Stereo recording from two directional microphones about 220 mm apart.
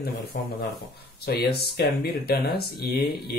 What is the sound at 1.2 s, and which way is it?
Speech, 45° left (ahead or behind).